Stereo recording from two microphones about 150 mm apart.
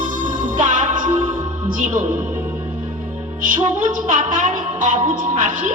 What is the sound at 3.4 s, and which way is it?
Music, 60° right (ahead or behind).